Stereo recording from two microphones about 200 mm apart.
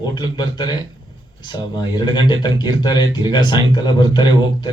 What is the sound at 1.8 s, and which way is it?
Speech, 20° left (ahead or behind).